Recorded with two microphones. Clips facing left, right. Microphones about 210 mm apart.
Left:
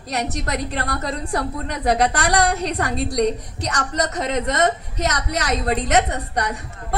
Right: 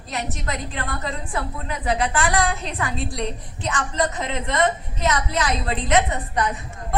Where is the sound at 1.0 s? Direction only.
40° left (ahead or behind).